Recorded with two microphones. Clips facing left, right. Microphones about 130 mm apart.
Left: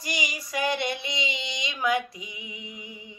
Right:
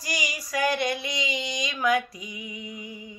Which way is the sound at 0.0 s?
25° left (ahead or behind).